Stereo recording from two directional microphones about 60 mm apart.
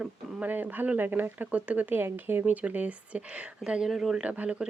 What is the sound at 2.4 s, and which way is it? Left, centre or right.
Speech, right.